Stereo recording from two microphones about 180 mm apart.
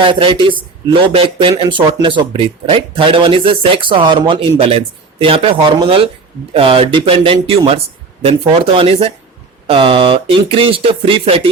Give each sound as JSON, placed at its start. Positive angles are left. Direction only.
{"t": 0.0, "sound": "speech", "side_deg": -30}